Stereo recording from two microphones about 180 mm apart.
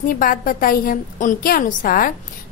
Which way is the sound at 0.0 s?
50° left (ahead or behind).